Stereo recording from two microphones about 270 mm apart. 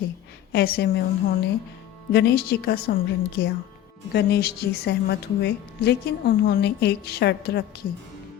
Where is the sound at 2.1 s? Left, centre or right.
Left.